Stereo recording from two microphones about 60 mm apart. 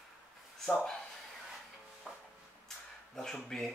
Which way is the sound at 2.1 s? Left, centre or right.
Centre.